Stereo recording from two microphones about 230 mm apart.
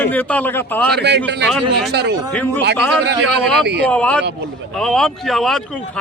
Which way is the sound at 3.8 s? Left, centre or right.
Centre.